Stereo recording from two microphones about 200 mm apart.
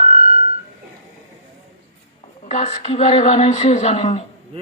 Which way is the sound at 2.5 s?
35° left (ahead or behind).